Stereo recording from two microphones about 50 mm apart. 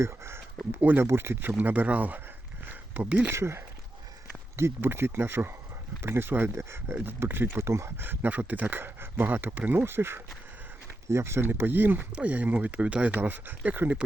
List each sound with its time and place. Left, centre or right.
0.0 s a sound: right
0.8 s speech: right
1.0 s speech: right
3.2 s speech: right
6.5 s speech: right
6.9 s speech: right
7.9 s speech: right
9.8 s speech: right
12.1 s speech: right